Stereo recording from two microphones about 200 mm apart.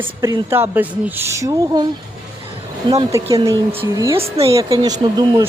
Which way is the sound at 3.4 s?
25° right (ahead or behind).